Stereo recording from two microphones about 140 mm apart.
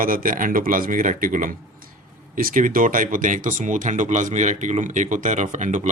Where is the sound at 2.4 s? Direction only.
85° right; by 5.9 s 60° right (ahead or behind).